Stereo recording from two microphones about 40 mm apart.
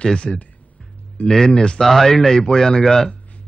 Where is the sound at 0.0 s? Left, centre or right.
Left.